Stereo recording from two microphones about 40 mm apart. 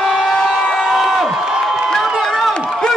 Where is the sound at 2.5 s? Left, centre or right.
Centre.